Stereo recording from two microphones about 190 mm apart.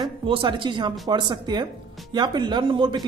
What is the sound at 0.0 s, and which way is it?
Speech, 25° right (ahead or behind).